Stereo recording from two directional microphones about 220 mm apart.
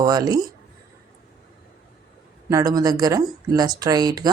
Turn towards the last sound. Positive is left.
turn(degrees=-15)  # may be behind; listen again after turning